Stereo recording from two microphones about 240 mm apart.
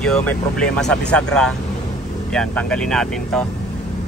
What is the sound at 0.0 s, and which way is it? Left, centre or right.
Speech, centre.